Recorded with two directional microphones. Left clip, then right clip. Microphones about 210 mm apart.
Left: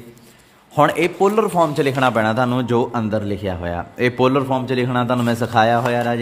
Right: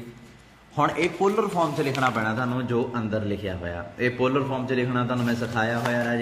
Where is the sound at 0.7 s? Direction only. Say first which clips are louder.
Left 8 dB; 45° left (ahead or behind).